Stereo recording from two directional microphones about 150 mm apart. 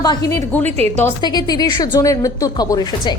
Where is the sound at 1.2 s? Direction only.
25° left (ahead or behind).